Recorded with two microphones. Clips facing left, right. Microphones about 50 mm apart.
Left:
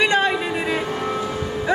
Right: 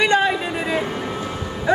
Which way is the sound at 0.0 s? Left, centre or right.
Centre.